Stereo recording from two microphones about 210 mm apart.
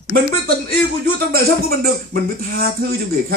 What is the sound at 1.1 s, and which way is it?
Speech, 45° right (ahead or behind).